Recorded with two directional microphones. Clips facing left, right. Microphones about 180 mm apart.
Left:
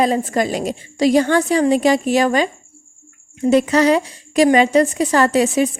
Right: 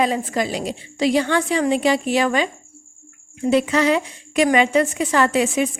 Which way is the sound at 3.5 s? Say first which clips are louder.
Left 4 dB; 40° left (ahead or behind).